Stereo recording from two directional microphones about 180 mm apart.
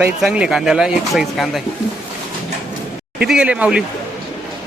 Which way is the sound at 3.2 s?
5° right (ahead or behind).